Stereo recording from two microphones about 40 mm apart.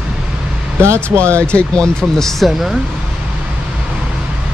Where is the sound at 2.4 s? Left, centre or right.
Centre.